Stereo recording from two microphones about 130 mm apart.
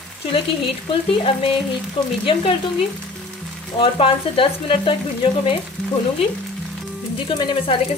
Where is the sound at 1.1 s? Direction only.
45° left (ahead or behind).